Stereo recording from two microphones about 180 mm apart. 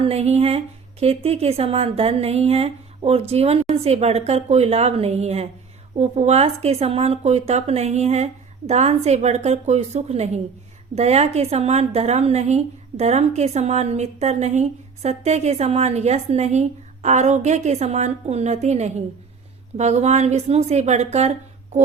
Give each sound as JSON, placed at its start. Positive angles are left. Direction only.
{"t": 0.0, "sound": "a woman's voice", "side_deg": -35}